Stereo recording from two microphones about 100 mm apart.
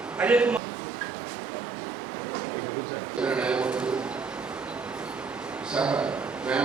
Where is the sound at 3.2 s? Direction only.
10° right (ahead or behind).